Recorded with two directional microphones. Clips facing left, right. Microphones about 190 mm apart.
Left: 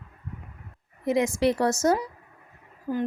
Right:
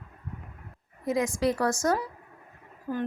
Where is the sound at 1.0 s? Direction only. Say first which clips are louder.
Left 3 dB; 25° left (ahead or behind).